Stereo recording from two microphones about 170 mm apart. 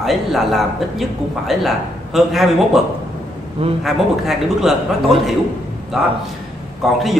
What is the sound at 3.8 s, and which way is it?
Speech, centre (ahead or behind).